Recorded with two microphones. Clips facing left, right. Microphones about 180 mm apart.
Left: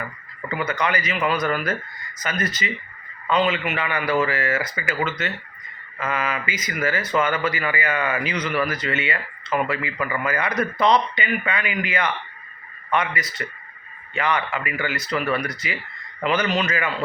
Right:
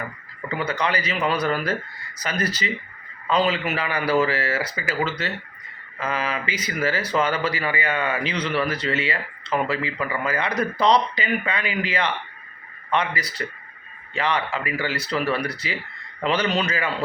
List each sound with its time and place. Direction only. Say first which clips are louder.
0.4 s speech: even; 30° right (ahead or behind)